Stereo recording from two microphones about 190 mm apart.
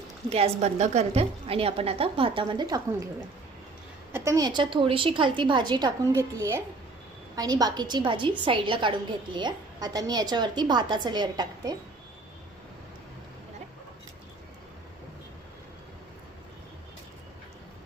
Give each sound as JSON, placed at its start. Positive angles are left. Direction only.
{"t": 0.3, "sound": "a woman's voice", "side_deg": -30}
{"t": 4.1, "sound": "a woman's voice", "side_deg": -15}